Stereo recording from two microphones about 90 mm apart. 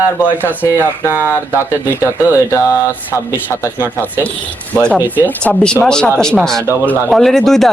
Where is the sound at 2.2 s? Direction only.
30° left (ahead or behind).